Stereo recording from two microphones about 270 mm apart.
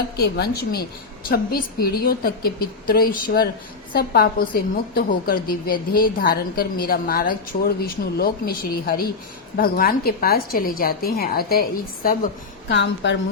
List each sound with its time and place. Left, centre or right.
0.2 s a woman's voice: left